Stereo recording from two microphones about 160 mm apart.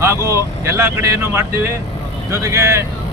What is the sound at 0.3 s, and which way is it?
Speech, 20° right (ahead or behind).